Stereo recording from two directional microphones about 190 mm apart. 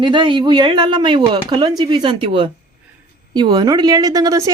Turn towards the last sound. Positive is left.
turn(degrees=-20)  # may be behind; listen again after turning